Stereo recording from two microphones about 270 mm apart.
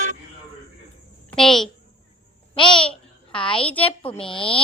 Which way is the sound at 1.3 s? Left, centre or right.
Centre.